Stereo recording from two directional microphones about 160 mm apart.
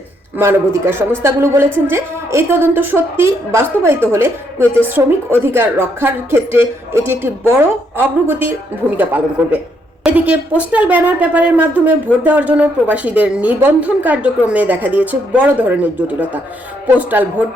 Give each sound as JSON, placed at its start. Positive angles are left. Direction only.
{"t": 0.3, "sound": "speech", "side_deg": -15}